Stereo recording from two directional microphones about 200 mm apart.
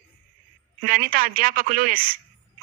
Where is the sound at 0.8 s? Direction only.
45° right (ahead or behind).